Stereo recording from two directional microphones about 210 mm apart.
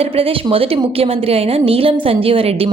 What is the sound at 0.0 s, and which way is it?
A woman's voice, 30° right (ahead or behind).